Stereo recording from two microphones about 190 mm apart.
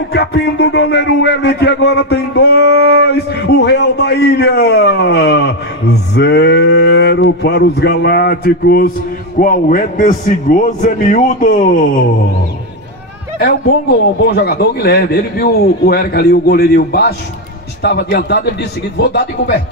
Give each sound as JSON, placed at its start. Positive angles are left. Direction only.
{"t": 0.1, "sound": "a man's voice", "side_deg": 60}
{"t": 13.4, "sound": "speech", "side_deg": 55}